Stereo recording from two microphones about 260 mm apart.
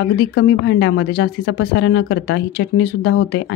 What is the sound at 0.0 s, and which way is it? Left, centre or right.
Speech, left.